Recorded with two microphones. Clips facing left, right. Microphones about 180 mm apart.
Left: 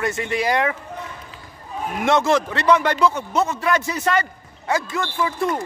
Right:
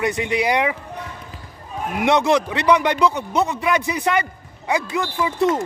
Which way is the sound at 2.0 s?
15° right (ahead or behind).